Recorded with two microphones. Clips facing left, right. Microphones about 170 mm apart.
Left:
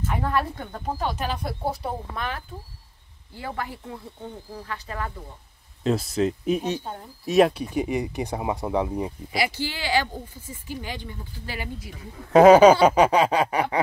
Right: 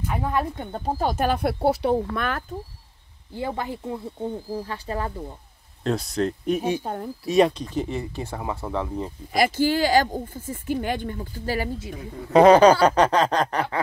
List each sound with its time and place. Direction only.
0.0 s speech: 10° right (ahead or behind); by 0.9 s 25° right (ahead or behind)
0.9 s speech: 45° right (ahead or behind); by 2.0 s 80° right
2.1 s speech: 55° right (ahead or behind)
3.3 s speech: 20° right (ahead or behind)
5.9 s speech: centre (ahead or behind)
6.8 s speech: 60° right (ahead or behind)
7.2 s speech: centre (ahead or behind)
9.3 s speech: 50° right (ahead or behind)
12.3 s speech: 5° left (ahead or behind)